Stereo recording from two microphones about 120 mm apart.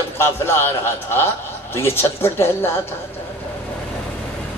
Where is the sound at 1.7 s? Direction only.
20° left (ahead or behind).